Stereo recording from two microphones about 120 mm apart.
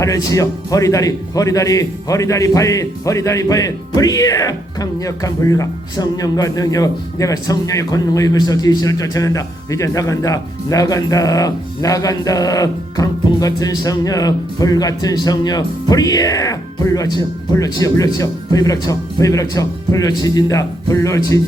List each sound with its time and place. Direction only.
0.0 s speech: 30° left (ahead or behind)